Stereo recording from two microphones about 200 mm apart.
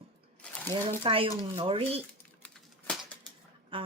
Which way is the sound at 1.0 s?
25° right (ahead or behind).